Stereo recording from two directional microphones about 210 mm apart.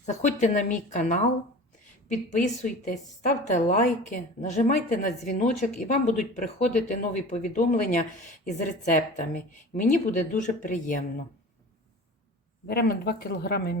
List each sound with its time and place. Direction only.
0.0 s speech: 35° left (ahead or behind)
12.6 s speech: 45° left (ahead or behind)